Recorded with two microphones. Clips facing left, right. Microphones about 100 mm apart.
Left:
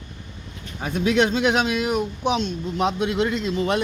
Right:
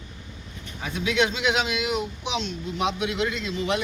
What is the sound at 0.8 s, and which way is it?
Speech, 45° left (ahead or behind).